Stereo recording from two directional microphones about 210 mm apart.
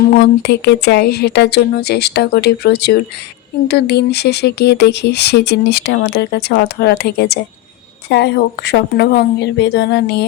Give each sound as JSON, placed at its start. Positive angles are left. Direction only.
{"t": 0.2, "sound": "speech", "side_deg": 50}